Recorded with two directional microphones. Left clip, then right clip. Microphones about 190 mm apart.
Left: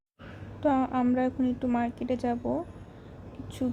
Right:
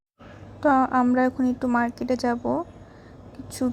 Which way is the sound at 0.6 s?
15° right (ahead or behind).